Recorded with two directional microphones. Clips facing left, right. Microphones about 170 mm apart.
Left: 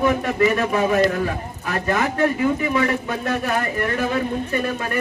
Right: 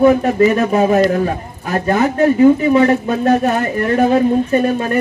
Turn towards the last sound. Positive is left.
turn(degrees=-30)  # may be behind; listen again after turning